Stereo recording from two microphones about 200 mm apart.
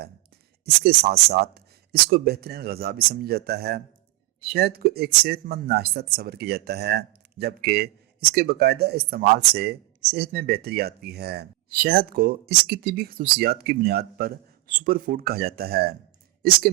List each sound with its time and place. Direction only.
0.6 s speech: 50° right (ahead or behind)